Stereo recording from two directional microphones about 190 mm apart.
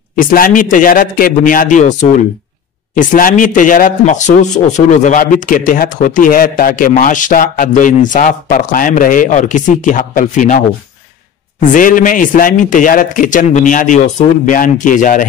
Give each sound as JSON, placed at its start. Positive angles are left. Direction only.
{"t": 0.1, "sound": "a man's voice", "side_deg": 50}
{"t": 11.7, "sound": "a man's voice", "side_deg": 45}